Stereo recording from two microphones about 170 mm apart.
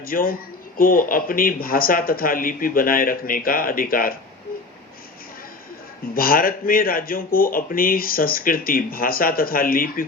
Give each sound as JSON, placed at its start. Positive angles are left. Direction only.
{"t": 0.0, "sound": "speech", "side_deg": 60}
{"t": 6.1, "sound": "speech", "side_deg": 60}